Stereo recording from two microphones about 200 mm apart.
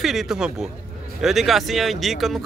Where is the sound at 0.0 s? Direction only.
Centre (ahead or behind).